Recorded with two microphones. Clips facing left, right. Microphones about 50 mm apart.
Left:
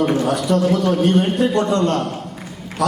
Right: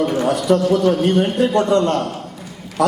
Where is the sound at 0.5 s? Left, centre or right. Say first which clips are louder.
Right 3 dB; right.